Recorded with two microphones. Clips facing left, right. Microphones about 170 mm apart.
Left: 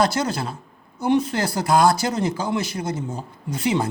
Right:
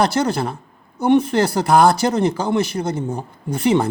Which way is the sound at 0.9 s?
60° right (ahead or behind).